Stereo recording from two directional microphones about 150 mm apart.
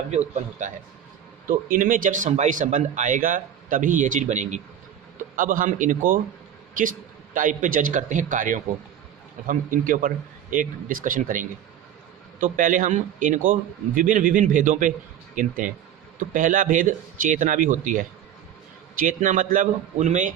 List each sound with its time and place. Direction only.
0.1 s speech: 50° right (ahead or behind)
1.7 s speech: 65° right (ahead or behind)
7.3 s speech: 60° right (ahead or behind)